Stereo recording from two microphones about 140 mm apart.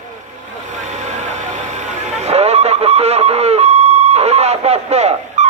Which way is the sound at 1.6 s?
55° right (ahead or behind).